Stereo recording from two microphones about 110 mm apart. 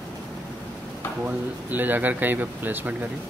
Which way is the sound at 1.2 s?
15° right (ahead or behind).